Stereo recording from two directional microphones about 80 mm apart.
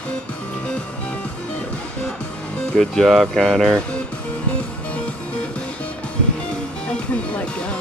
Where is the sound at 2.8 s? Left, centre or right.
Centre.